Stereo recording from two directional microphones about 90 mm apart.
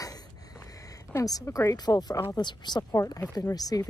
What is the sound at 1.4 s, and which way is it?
Speech, 35° left (ahead or behind).